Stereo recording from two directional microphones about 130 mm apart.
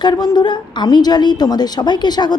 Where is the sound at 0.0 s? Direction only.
35° left (ahead or behind).